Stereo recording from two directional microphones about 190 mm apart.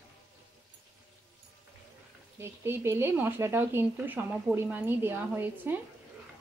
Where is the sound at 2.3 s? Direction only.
10° right (ahead or behind).